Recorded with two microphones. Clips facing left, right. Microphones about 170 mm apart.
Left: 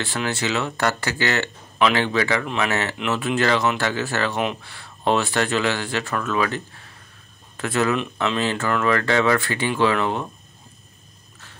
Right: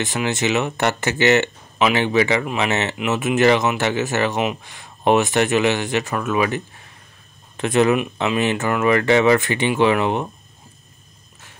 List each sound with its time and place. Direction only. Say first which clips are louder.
0.0 s speech: right 4 dB; 15° right (ahead or behind)